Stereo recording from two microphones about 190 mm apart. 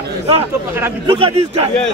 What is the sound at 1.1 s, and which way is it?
Speech, 30° right (ahead or behind).